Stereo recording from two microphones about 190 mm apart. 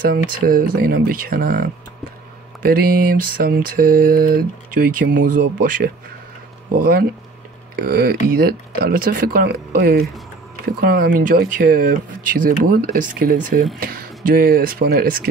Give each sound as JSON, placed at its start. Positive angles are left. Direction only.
{"t": 0.0, "sound": "speech", "side_deg": -50}